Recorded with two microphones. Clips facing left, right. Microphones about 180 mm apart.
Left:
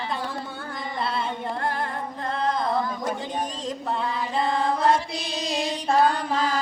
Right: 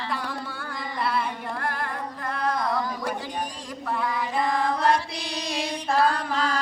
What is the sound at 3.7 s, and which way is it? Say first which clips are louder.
Chant: right 1 dB; 25° left (ahead or behind).